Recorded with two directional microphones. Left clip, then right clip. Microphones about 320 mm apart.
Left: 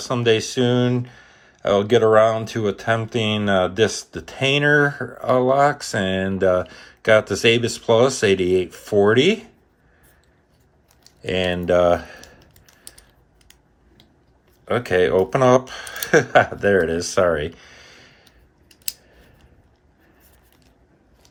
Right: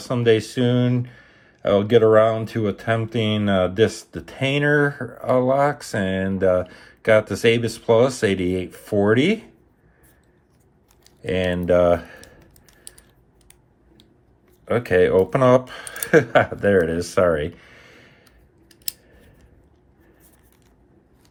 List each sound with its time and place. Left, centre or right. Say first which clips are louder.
0.0 s speech: even; centre
11.2 s speech: left 1 dB; centre
14.6 s speech: right 1 dB; centre